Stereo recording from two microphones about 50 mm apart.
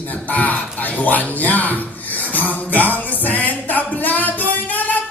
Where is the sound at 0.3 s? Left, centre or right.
Left.